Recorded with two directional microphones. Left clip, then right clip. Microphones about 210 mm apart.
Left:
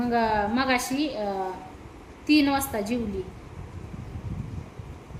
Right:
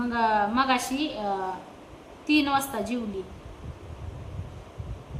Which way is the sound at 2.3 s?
10° left (ahead or behind).